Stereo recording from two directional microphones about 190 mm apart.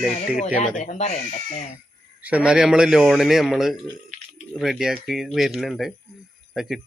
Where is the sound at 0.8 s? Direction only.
40° left (ahead or behind).